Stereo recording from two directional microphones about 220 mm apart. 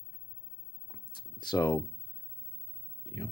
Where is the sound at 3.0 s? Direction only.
20° left (ahead or behind).